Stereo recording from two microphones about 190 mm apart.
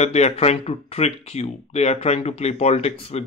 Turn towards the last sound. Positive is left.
turn(degrees=35)  # may be behind; listen again after turning